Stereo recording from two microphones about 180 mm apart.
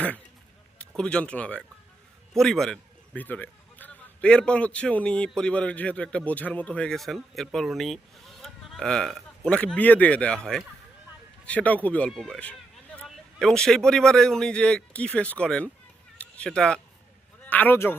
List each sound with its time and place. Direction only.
0.8 s a man's voice: 5° left (ahead or behind)